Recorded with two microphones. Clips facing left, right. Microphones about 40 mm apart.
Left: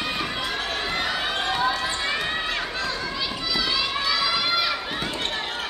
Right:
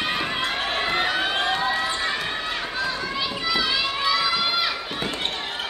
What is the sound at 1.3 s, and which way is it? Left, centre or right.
Basketball bounce, centre.